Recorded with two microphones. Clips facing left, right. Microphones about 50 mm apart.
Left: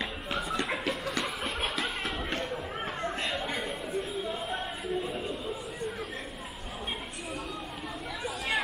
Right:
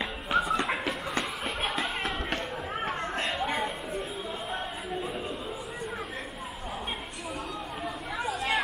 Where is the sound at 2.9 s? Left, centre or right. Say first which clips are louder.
Right 1 dB; right.